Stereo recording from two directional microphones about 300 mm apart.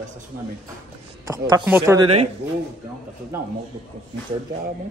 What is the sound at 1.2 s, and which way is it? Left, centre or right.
Speech, centre.